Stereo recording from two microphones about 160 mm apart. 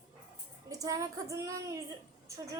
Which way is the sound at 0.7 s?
20° right (ahead or behind).